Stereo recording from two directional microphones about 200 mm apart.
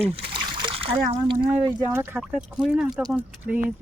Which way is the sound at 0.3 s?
25° right (ahead or behind).